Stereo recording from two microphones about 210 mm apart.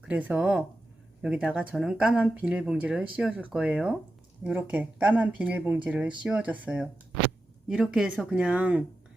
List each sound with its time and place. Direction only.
0.1 s speech: 5° right (ahead or behind)